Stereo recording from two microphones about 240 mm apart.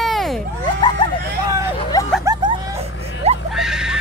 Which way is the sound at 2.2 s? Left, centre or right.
Centre.